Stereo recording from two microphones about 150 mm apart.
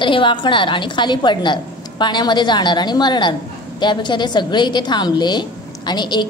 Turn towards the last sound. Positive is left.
turn(degrees=30)  # may be behind; listen again after turning